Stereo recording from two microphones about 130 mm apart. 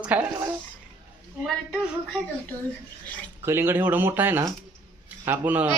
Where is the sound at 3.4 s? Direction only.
20° right (ahead or behind).